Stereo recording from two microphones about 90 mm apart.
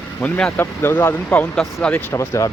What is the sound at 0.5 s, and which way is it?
Speech, 25° left (ahead or behind).